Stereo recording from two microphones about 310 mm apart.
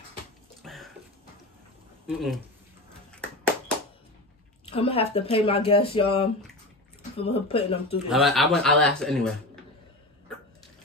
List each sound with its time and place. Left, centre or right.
0.6 s a sound: centre
2.0 s a man's voice: centre
4.6 s a woman's voice: centre
5.7 s a sound: centre
7.0 s speech: centre
8.1 s a man's voice: centre